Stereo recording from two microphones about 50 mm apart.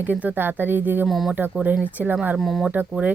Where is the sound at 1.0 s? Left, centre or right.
Centre.